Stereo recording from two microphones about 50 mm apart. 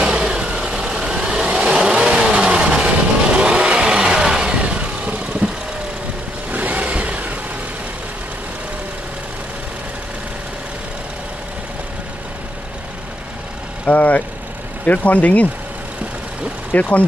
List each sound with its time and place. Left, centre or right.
0.0 s vehicle: centre
6.5 s vehicle: right
13.8 s speech: left
16.7 s speech: left